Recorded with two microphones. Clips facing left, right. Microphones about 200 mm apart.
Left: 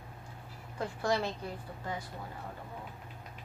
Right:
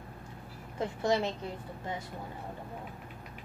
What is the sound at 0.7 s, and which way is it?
Speech, 20° right (ahead or behind).